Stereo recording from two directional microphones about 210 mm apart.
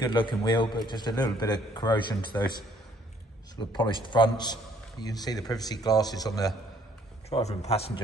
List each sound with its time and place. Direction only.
0.0 s a man's voice: 20° left (ahead or behind)
7.2 s a man's voice: 30° left (ahead or behind)